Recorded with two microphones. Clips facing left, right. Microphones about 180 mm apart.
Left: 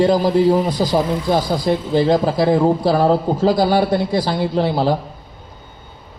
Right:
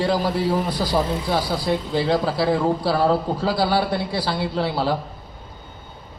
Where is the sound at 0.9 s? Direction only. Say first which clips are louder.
Left 3 dB; 15° left (ahead or behind).